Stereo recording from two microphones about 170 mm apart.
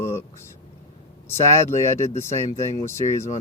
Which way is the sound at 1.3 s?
15° left (ahead or behind).